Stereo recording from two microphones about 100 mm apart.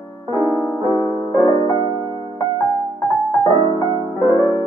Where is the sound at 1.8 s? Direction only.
45° right (ahead or behind).